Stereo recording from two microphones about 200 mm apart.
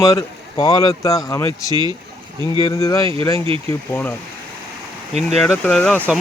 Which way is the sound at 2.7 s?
15° left (ahead or behind).